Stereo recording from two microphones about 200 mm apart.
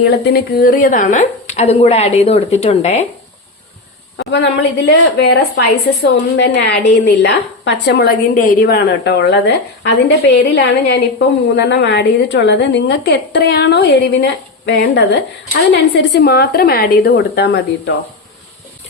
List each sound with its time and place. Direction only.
0.0 s a woman's voice: 55° left (ahead or behind); by 3.1 s 30° left (ahead or behind)
4.2 s a woman's voice: 60° left (ahead or behind)